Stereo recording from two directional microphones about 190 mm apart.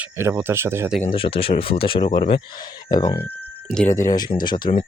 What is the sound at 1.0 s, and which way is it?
Speech, 30° left (ahead or behind).